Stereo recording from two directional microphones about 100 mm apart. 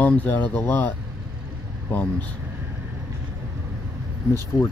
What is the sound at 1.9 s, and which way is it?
Speech, 15° left (ahead or behind).